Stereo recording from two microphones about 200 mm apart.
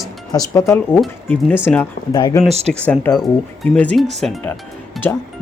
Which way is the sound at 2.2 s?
20° left (ahead or behind).